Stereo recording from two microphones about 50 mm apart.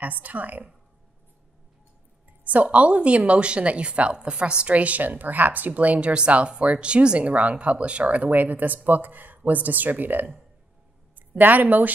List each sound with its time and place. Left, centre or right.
0.0 s a woman's voice: right
2.4 s speech: right